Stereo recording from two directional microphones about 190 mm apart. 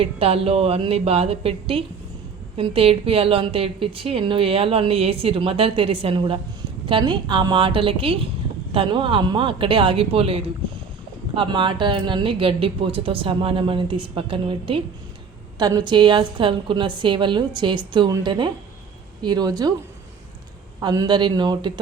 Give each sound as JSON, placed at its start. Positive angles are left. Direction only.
{"t": 0.0, "sound": "a woman's voice", "side_deg": -30}
{"t": 20.8, "sound": "a woman's voice", "side_deg": -20}